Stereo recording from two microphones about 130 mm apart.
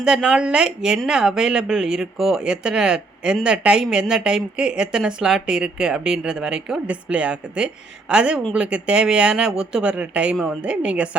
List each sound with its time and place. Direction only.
0.0 s speech: 5° right (ahead or behind)